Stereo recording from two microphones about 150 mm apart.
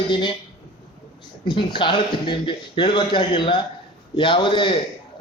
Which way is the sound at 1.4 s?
35° left (ahead or behind).